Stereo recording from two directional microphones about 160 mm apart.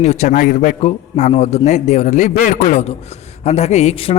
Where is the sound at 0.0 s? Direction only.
45° left (ahead or behind).